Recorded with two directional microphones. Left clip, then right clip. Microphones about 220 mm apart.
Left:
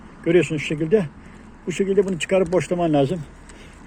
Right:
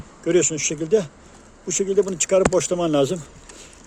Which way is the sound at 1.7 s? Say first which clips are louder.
Even; 65° right (ahead or behind).